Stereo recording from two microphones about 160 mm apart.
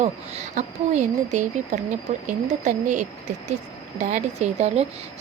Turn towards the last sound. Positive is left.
turn(degrees=-40)  # may be behind; listen again after turning